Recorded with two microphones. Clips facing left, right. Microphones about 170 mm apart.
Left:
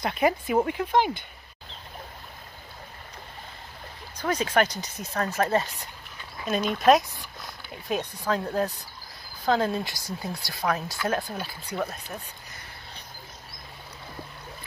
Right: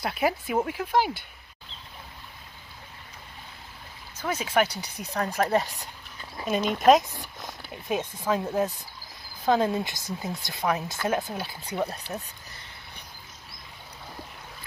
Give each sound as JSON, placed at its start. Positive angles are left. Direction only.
{"t": 0.0, "sound": "speech", "side_deg": -5}
{"t": 4.2, "sound": "speech", "side_deg": -10}
{"t": 6.4, "sound": "speech", "side_deg": -35}
{"t": 6.9, "sound": "speech", "side_deg": -20}
{"t": 8.0, "sound": "speech", "side_deg": 0}
{"t": 8.3, "sound": "speech", "side_deg": -20}